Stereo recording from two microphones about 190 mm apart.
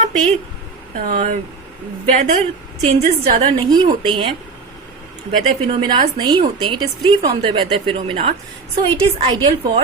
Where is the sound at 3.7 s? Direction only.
25° right (ahead or behind).